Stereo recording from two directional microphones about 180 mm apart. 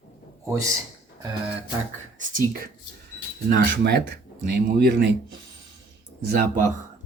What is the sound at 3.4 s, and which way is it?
Speech, 60° right (ahead or behind).